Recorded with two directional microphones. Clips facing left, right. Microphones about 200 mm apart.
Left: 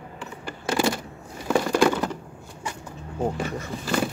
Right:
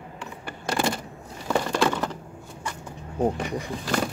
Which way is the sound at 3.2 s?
15° right (ahead or behind).